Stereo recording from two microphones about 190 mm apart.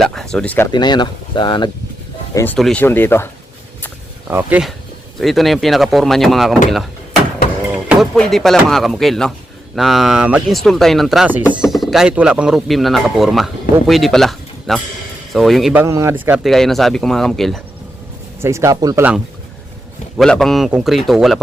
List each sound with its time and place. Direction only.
0.0 s speech: 5° left (ahead or behind)
0.7 s speech: 25° left (ahead or behind)
2.3 s speech: 10° left (ahead or behind)
2.6 s speech: centre (ahead or behind)
4.3 s speech: 10° right (ahead or behind)
7.9 s speech: centre (ahead or behind)
18.3 s speech: 15° right (ahead or behind)
20.1 s speech: centre (ahead or behind)